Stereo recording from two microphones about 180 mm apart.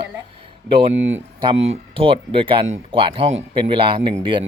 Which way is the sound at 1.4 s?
30° right (ahead or behind).